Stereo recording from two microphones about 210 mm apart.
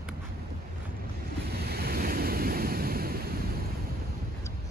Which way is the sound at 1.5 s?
50° right (ahead or behind).